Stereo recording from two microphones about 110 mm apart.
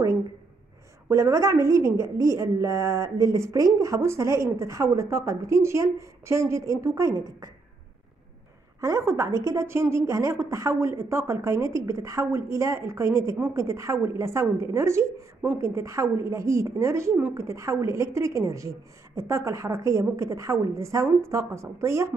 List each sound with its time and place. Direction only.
1.0 s a woman's voice: 25° right (ahead or behind)
8.8 s a woman's voice: 25° right (ahead or behind)
15.4 s speech: 15° right (ahead or behind)
15.7 s a woman's voice: 25° right (ahead or behind)